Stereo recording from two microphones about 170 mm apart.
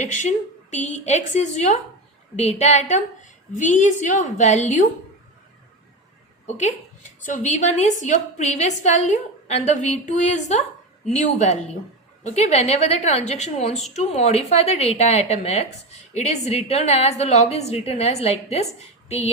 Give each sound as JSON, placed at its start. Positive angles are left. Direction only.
{"t": 0.0, "sound": "a woman's voice", "side_deg": 45}
{"t": 6.6, "sound": "a woman's voice", "side_deg": 45}